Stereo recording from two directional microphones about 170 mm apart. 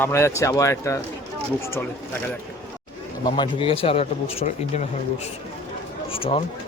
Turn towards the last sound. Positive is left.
turn(degrees=35)  # may be behind; listen again after turning